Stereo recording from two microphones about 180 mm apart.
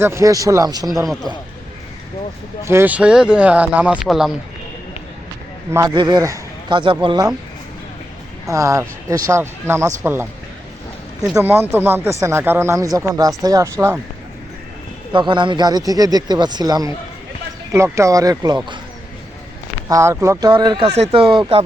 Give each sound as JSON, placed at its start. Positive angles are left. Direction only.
{"t": 0.0, "sound": "speech", "side_deg": -15}
{"t": 1.0, "sound": "speech", "side_deg": 0}
{"t": 2.6, "sound": "speech", "side_deg": -10}
{"t": 5.7, "sound": "speech", "side_deg": -20}
{"t": 8.4, "sound": "speech", "side_deg": -15}
{"t": 11.3, "sound": "speech", "side_deg": -10}
{"t": 15.1, "sound": "speech", "side_deg": -25}
{"t": 19.9, "sound": "speech", "side_deg": -15}